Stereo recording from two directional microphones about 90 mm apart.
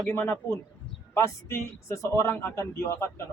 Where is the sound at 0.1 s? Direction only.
30° left (ahead or behind).